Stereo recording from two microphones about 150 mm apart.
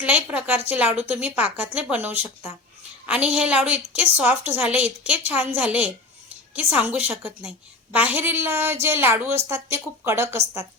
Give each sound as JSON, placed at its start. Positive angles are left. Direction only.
{"t": 0.0, "sound": "a woman's voice", "side_deg": -10}